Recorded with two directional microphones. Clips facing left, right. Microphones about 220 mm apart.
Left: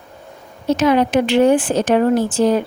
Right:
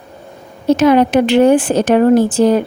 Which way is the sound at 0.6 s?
60° right (ahead or behind).